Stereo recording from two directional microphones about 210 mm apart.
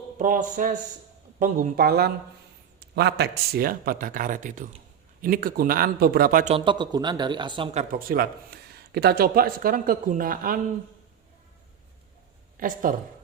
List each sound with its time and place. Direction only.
0.2 s speech: 40° right (ahead or behind)
6.5 s speech: 20° right (ahead or behind); by 10.6 s 40° right (ahead or behind)
12.5 s speech: 40° right (ahead or behind)